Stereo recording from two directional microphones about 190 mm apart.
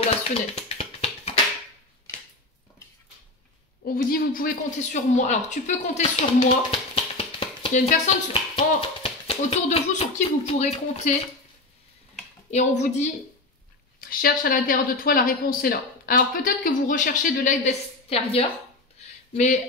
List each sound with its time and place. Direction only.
0.6 s music: 30° left (ahead or behind)
3.8 s speech: 50° left (ahead or behind)
6.5 s a sound: 30° left (ahead or behind)
7.7 s speech: 40° left (ahead or behind)
12.4 s speech: 35° left (ahead or behind)
14.0 s speech: 50° left (ahead or behind); by 18.4 s 35° left (ahead or behind)
18.9 s a sound: 40° left (ahead or behind)